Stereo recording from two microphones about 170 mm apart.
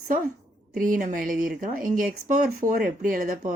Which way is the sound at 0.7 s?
50° right (ahead or behind).